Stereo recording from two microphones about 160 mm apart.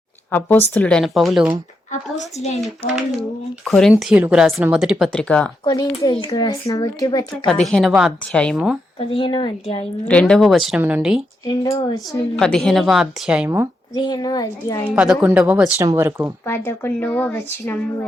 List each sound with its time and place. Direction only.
0.3 s speech: 10° left (ahead or behind)
1.9 s a child's voice: 45° left (ahead or behind)
2.6 s speech: centre (ahead or behind)
5.6 s a child's voice: 25° left (ahead or behind)
7.4 s speech: 5° left (ahead or behind)
9.0 s a woman's voice: 35° left (ahead or behind)
10.1 s speech: 5° left (ahead or behind)
11.4 s a child's voice: 20° left (ahead or behind)
12.4 s speech: 5° left (ahead or behind)
13.9 s a child's voice: 25° left (ahead or behind)
14.8 s a woman's voice: 5° right (ahead or behind)
16.5 s speech: 15° left (ahead or behind)